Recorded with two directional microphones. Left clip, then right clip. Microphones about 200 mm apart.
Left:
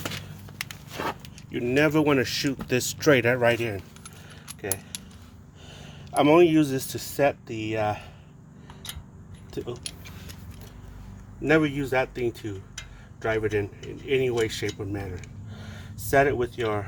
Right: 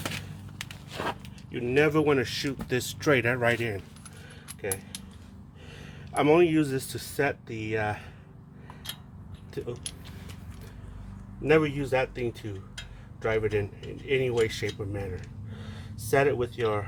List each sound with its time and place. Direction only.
0.6 s a sound: 35° left (ahead or behind)
1.5 s speech: 45° left (ahead or behind); by 3.8 s 30° left (ahead or behind)
4.4 s keys jangling: 30° left (ahead or behind)
5.8 s speech: 35° left (ahead or behind)
11.4 s speech: 35° left (ahead or behind)